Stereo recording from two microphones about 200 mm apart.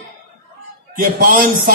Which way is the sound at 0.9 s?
45° right (ahead or behind).